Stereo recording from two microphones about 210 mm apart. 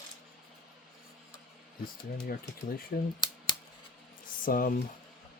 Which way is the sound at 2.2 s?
45° left (ahead or behind).